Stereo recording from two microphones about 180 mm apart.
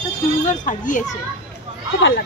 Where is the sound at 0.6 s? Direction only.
45° left (ahead or behind).